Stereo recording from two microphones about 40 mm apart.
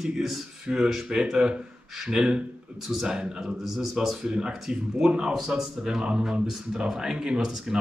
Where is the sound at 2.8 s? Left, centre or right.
Centre.